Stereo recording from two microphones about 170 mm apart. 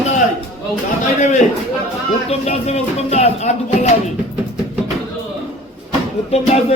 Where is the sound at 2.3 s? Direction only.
40° left (ahead or behind).